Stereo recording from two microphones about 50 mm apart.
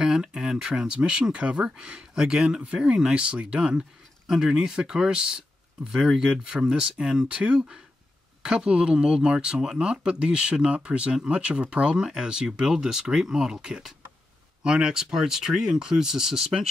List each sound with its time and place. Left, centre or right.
0.0 s speech: centre